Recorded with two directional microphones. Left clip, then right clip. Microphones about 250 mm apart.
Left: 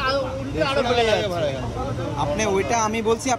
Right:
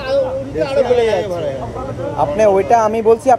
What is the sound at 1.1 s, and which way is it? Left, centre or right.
Speech, left.